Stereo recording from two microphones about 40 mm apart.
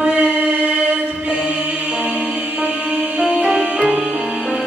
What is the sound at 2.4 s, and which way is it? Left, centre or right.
Music, right.